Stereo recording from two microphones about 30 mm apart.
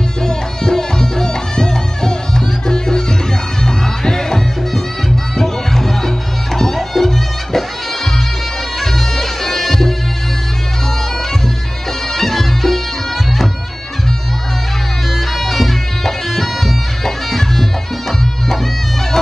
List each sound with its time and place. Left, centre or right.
0.2 s music: centre
8.7 s bagpipes: centre
12.1 s music: centre
15.1 s music: centre